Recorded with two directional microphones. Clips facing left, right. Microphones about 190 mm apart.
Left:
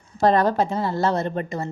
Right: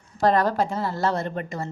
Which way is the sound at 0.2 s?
25° left (ahead or behind).